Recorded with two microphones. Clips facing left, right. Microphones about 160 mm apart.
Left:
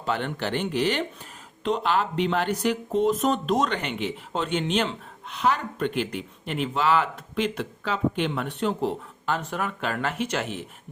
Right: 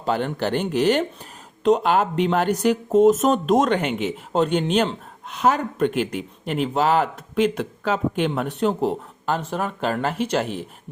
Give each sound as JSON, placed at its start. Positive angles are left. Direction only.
{"t": 0.0, "sound": "speech", "side_deg": -40}
{"t": 9.4, "sound": "speech", "side_deg": -30}